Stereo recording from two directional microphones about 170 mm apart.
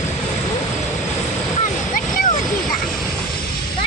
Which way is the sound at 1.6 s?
55° left (ahead or behind).